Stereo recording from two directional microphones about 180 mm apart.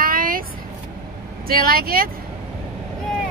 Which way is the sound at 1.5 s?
55° right (ahead or behind).